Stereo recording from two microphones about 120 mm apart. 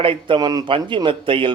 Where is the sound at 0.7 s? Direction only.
45° right (ahead or behind).